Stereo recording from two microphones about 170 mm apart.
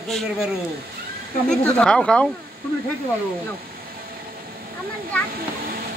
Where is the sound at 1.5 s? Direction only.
5° left (ahead or behind).